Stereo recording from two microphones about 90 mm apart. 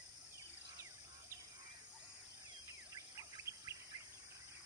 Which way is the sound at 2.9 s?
35° right (ahead or behind).